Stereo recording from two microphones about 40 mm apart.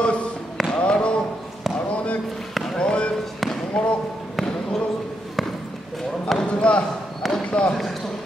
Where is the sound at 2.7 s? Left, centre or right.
Left.